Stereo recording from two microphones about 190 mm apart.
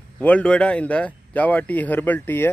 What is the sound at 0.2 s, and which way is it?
Speech, 5° left (ahead or behind).